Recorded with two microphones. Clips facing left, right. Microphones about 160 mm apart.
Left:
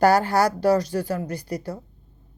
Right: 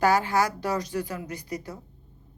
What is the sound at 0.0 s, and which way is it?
Speech, 35° left (ahead or behind).